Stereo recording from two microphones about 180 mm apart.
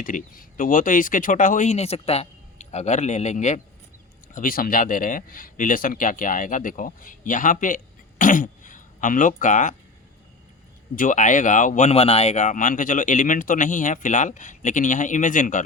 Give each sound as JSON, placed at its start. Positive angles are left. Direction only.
{"t": 0.0, "sound": "speech", "side_deg": 50}
{"t": 10.9, "sound": "speech", "side_deg": 45}